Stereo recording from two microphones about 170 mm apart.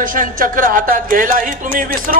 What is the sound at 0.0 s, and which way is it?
Speech, 55° right (ahead or behind).